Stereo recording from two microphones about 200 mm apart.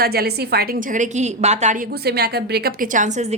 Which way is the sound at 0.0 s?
50° right (ahead or behind).